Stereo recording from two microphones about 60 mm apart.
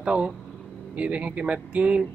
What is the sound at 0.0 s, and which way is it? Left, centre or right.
Speech, centre.